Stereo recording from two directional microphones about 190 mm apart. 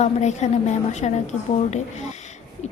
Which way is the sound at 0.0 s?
35° left (ahead or behind).